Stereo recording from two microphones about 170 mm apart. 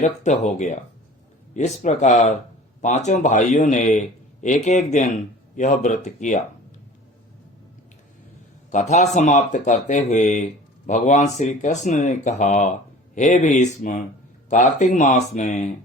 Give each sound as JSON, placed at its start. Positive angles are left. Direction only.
{"t": 0.0, "sound": "speech", "side_deg": 45}
{"t": 8.7, "sound": "speech", "side_deg": 40}